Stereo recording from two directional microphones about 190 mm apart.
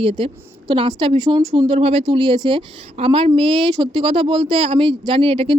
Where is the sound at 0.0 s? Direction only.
30° right (ahead or behind).